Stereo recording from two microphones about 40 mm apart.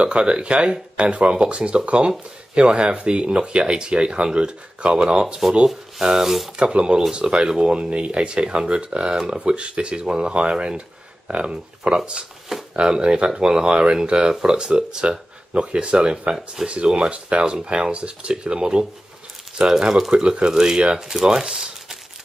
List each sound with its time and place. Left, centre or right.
0.0 s speech: right
5.7 s rub: centre
6.6 s speech: right
12.5 s a sound: centre
13.0 s speech: right
21.1 s rub: centre